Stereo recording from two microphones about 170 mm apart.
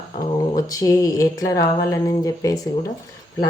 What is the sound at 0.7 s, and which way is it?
Speech, 20° left (ahead or behind).